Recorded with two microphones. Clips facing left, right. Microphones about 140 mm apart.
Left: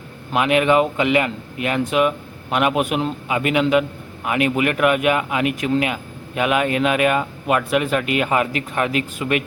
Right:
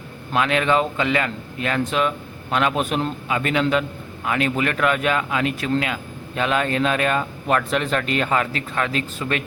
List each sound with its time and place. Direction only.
0.3 s a man's voice: 15° left (ahead or behind)